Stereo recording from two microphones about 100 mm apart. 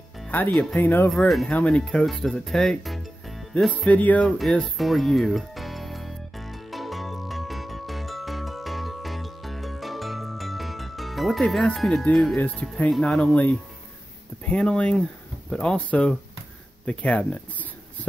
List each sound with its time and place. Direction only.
0.5 s speech: centre (ahead or behind)
0.7 s speech: 20° left (ahead or behind); by 3.4 s centre (ahead or behind)
3.5 s speech: 10° left (ahead or behind)
4.7 s music: centre (ahead or behind)
12.4 s speech: 15° left (ahead or behind)